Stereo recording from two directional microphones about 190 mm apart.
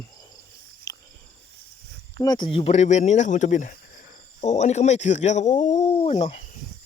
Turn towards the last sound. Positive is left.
turn(degrees=35)  # may be behind; listen again after turning